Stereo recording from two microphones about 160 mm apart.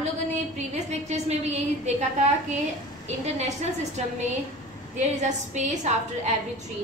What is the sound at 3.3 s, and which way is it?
A woman's voice, 45° right (ahead or behind).